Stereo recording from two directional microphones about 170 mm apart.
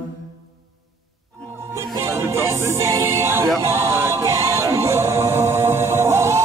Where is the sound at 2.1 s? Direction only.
15° right (ahead or behind).